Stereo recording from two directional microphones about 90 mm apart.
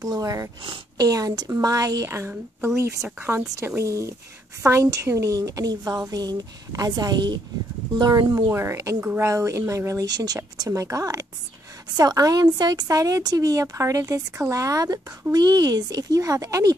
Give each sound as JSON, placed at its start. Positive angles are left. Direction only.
{"t": 0.0, "sound": "a woman's voice", "side_deg": -40}
{"t": 2.0, "sound": "a woman's voice", "side_deg": -25}
{"t": 3.2, "sound": "a woman's voice", "side_deg": -25}
{"t": 8.4, "sound": "a woman's voice", "side_deg": -30}